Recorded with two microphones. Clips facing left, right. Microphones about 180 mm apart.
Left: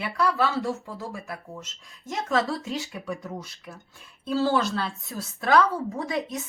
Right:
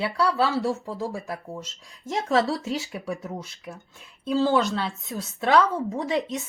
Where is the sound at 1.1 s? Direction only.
35° right (ahead or behind).